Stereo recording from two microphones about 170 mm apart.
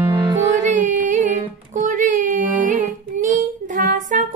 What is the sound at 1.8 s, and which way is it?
Child singing, 50° right (ahead or behind).